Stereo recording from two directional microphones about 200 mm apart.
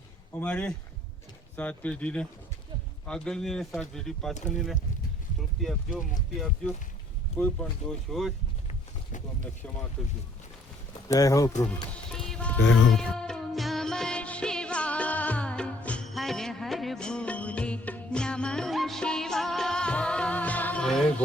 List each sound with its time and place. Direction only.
0.3 s speech: 5° left (ahead or behind)
7.3 s speech: 5° left (ahead or behind)
10.0 s speech: 5° left (ahead or behind)
11.1 s speech: 15° left (ahead or behind)
12.1 s music: 5° left (ahead or behind)
12.5 s speech: 65° left (ahead or behind)
12.9 s music: 5° left (ahead or behind)